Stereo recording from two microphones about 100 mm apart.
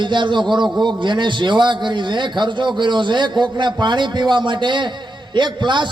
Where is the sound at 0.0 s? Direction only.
50° right (ahead or behind).